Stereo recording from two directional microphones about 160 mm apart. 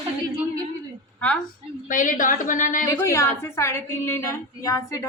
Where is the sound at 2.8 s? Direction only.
20° left (ahead or behind).